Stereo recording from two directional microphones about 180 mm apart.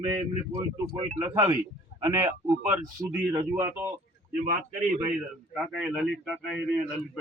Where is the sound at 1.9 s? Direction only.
60° left (ahead or behind).